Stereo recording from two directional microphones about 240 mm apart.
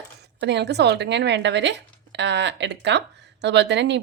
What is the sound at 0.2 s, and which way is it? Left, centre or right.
A woman's voice, right.